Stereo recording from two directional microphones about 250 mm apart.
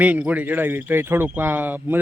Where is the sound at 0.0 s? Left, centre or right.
Centre.